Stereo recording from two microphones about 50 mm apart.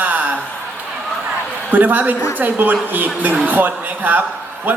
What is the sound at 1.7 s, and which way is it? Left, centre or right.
A woman's voice, right.